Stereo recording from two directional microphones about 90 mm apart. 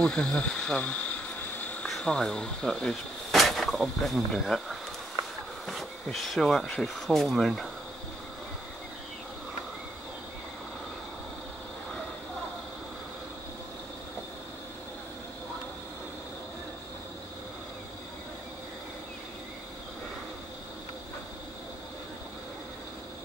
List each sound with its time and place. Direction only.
0.0 s speech: 10° left (ahead or behind)
1.6 s a sound: 15° left (ahead or behind)
1.9 s insect: 10° left (ahead or behind)
6.0 s speech: centre (ahead or behind)